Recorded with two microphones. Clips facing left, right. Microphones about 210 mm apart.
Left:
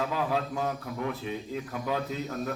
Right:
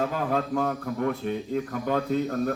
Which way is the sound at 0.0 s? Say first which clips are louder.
Right 3 dB; 50° right (ahead or behind).